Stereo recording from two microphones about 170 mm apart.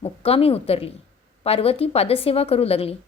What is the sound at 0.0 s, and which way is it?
A woman's voice, 35° left (ahead or behind).